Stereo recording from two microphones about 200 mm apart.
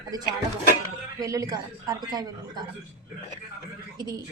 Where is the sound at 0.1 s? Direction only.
20° right (ahead or behind).